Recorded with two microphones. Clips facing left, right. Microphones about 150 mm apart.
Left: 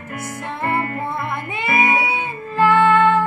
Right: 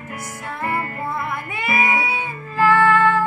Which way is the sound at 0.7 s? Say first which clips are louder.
Left 3 dB; 25° left (ahead or behind).